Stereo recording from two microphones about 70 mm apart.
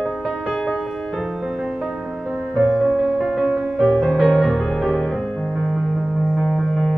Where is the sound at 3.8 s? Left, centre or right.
Centre.